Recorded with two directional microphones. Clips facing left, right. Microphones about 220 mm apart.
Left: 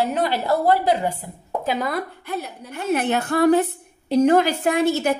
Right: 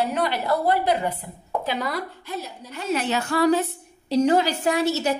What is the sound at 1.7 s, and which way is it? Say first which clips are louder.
A woman's voice: left 5 dB; 50° left (ahead or behind).